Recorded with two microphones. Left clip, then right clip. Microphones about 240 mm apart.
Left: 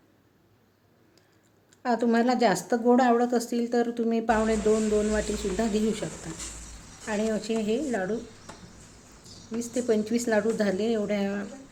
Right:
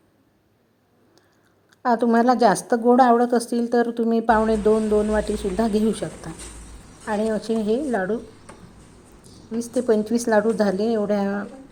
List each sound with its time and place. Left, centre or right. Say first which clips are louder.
1.8 s speech: right 6 dB; centre
9.9 s speech: right 6 dB; centre